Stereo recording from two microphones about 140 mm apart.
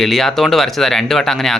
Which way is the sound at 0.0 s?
Centre (ahead or behind).